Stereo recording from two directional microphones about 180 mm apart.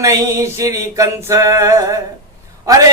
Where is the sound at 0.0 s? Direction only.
20° right (ahead or behind).